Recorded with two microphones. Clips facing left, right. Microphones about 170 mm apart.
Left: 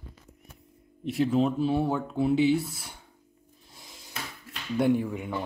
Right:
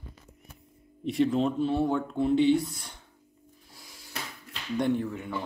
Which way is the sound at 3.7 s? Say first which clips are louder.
Left 2 dB; 20° left (ahead or behind).